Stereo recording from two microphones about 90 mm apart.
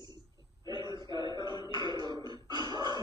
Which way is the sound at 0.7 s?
55° right (ahead or behind).